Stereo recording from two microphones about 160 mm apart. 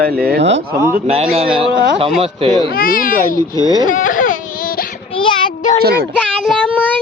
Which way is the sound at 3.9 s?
55° left (ahead or behind).